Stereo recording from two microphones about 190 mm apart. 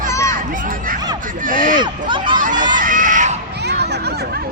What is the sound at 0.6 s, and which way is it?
Speech, 45° right (ahead or behind).